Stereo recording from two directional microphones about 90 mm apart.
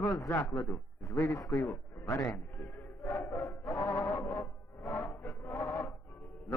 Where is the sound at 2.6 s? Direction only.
25° left (ahead or behind).